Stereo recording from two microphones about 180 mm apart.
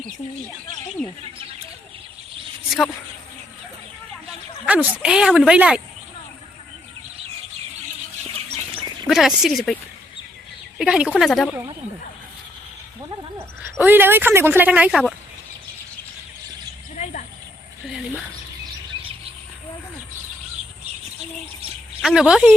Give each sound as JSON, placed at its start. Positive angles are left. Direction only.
{"t": 2.6, "sound": "speech", "side_deg": 5}
{"t": 4.6, "sound": "speech", "side_deg": -5}
{"t": 9.0, "sound": "speech", "side_deg": 0}
{"t": 10.8, "sound": "speech", "side_deg": -5}
{"t": 13.7, "sound": "speech", "side_deg": -10}
{"t": 17.0, "sound": "a sound", "side_deg": 45}
{"t": 17.8, "sound": "mechanisms", "side_deg": 0}
{"t": 22.0, "sound": "speech", "side_deg": -5}